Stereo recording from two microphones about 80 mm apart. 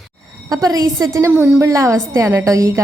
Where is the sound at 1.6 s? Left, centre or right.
Right.